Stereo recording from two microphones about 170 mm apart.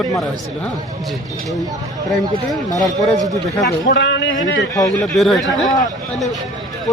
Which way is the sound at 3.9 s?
90° left.